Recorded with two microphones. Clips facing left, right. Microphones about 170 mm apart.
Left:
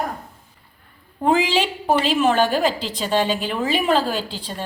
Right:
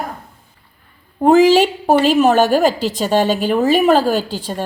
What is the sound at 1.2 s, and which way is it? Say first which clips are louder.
A woman's voice: right 9 dB; 40° right (ahead or behind).